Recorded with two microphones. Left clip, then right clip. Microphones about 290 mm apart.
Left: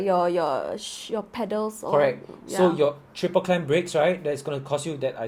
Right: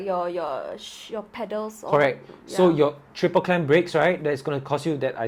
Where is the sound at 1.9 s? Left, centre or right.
Right.